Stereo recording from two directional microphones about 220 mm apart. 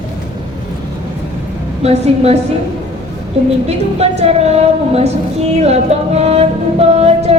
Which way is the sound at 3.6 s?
30° right (ahead or behind).